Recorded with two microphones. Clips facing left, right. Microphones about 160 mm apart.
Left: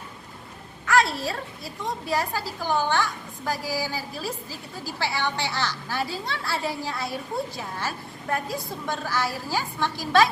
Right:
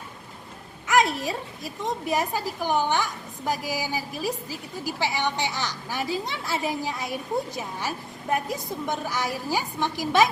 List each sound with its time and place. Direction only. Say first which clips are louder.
0.9 s a woman's voice: even; 20° right (ahead or behind)